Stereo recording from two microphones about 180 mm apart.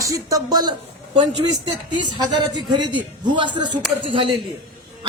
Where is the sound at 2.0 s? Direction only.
25° right (ahead or behind).